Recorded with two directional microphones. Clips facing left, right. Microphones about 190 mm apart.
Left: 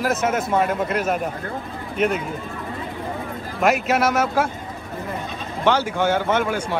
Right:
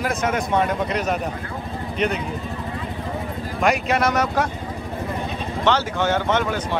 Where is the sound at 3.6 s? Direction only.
5° left (ahead or behind).